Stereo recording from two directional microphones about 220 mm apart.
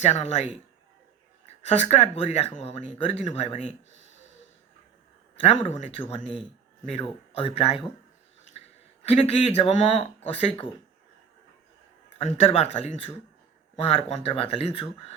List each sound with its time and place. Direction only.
0.0 s speech: 30° left (ahead or behind)
1.5 s speech: 30° left (ahead or behind)
5.5 s speech: 30° left (ahead or behind)
9.1 s speech: 30° left (ahead or behind)
12.2 s speech: 30° left (ahead or behind)